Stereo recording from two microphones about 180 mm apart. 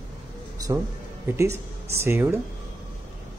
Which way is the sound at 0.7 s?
20° right (ahead or behind).